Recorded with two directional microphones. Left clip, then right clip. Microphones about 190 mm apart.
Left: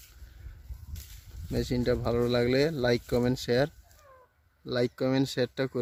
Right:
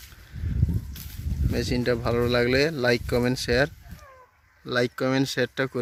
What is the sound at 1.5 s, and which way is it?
Speech, 5° left (ahead or behind).